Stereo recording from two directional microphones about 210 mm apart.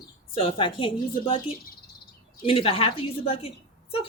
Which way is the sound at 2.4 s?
25° left (ahead or behind).